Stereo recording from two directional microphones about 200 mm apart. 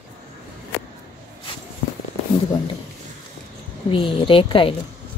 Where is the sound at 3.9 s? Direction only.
25° left (ahead or behind).